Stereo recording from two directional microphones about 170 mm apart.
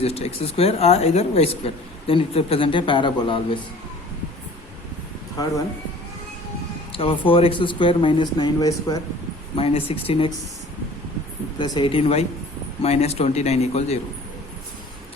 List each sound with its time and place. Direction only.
0.0 s speech: 35° left (ahead or behind)
6.9 s speech: 30° left (ahead or behind)
11.6 s speech: 30° left (ahead or behind)